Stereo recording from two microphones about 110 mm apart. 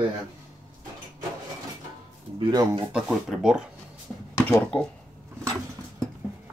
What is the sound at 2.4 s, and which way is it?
Speech, 35° right (ahead or behind).